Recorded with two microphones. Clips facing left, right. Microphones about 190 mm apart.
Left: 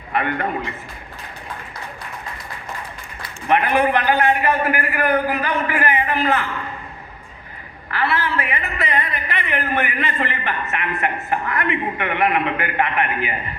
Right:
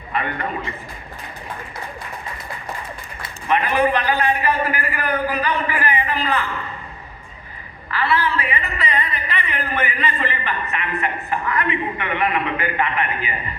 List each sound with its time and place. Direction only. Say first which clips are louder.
0.1 s a man's voice: left 3 dB; 55° left (ahead or behind)
3.5 s a man's voice: left 1 dB; 55° left (ahead or behind)
7.9 s a man's voice: right 1 dB; 50° left (ahead or behind)